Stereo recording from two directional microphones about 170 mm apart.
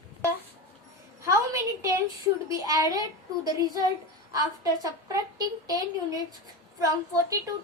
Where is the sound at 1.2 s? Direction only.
20° right (ahead or behind).